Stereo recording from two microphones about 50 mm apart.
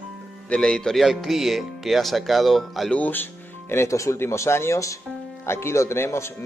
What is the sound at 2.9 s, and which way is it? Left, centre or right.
Speech, left.